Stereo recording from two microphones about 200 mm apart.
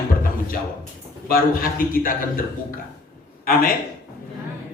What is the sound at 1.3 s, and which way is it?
A man's voice, 45° left (ahead or behind).